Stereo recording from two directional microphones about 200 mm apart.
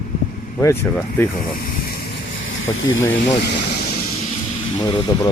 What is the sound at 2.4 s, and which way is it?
Vehicle, 75° left (ahead or behind).